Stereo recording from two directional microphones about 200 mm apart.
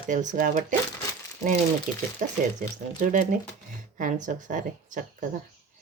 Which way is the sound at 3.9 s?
40° right (ahead or behind).